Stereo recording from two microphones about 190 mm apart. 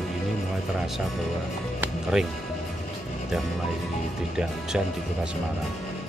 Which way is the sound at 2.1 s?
Centre (ahead or behind).